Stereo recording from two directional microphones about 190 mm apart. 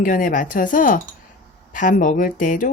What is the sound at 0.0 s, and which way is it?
Speech, 45° left (ahead or behind).